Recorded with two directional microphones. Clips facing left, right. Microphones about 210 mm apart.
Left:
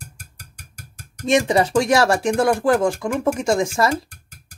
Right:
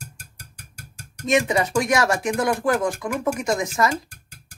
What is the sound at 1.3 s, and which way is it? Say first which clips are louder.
Speech: left 3 dB; 30° left (ahead or behind).